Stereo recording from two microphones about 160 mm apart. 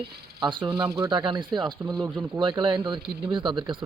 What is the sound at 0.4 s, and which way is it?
Speech, 30° right (ahead or behind).